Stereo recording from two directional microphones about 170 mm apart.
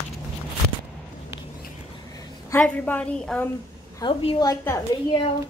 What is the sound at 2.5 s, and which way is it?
A woman's voice, 10° left (ahead or behind).